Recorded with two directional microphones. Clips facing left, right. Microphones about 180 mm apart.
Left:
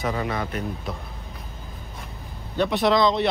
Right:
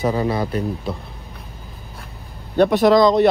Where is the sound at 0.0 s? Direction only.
30° right (ahead or behind).